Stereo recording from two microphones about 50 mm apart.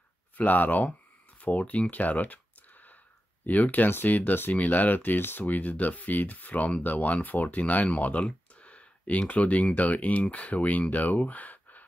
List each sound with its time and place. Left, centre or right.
0.4 s speech: left
3.4 s speech: left
7.8 s a sound: left
9.3 s speech: left